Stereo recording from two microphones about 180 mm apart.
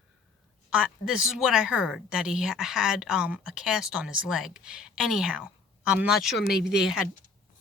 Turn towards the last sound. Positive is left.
turn(degrees=65)  # may be behind; listen again after turning